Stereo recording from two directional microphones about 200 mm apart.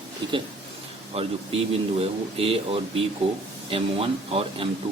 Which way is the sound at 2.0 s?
30° right (ahead or behind).